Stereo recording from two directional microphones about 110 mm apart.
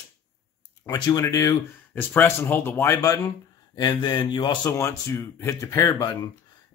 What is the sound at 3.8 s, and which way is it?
Speech, 40° left (ahead or behind).